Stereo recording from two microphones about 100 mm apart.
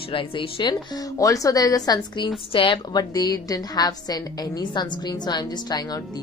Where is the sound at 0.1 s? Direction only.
60° left (ahead or behind).